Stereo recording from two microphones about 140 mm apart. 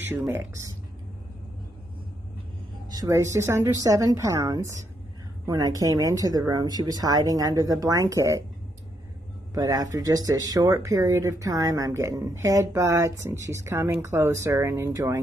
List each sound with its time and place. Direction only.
0.0 s speech: 15° right (ahead or behind)
2.9 s speech: 25° right (ahead or behind)
9.5 s speech: 25° right (ahead or behind)